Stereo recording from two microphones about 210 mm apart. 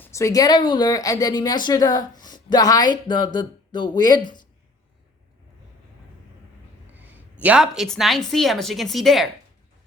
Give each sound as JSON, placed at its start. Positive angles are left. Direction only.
{"t": 0.0, "sound": "a woman's voice", "side_deg": 15}
{"t": 6.9, "sound": "speech", "side_deg": -10}